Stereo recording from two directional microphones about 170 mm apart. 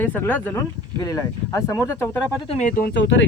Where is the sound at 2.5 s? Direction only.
45° left (ahead or behind).